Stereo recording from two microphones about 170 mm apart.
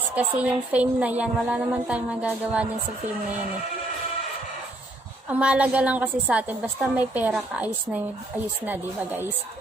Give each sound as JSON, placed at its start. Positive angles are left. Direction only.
{"t": 0.2, "sound": "a woman's voice", "side_deg": -10}
{"t": 5.3, "sound": "a woman's voice", "side_deg": -10}